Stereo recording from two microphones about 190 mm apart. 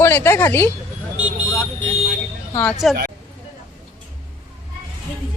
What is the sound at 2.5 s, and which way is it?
Speech, 5° left (ahead or behind).